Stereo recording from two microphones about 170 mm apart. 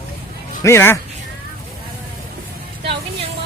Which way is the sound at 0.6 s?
15° left (ahead or behind).